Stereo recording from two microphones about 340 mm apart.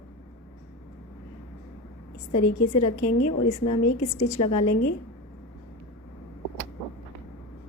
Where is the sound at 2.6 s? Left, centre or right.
Left.